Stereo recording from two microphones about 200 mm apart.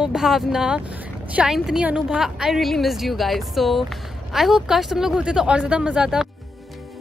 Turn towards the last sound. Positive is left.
turn(degrees=-5)  # may be behind; listen again after turning